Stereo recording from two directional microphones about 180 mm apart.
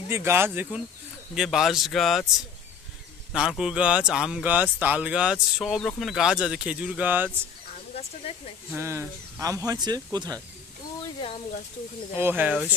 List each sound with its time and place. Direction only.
0.1 s speech: 15° right (ahead or behind)
3.3 s speech: 5° right (ahead or behind)
8.2 s speech: 30° left (ahead or behind)
8.6 s speech: 15° right (ahead or behind)
11.1 s speech: 30° left (ahead or behind)
12.2 s speech: 10° right (ahead or behind)